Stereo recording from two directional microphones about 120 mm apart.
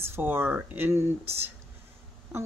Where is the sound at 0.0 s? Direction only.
20° right (ahead or behind).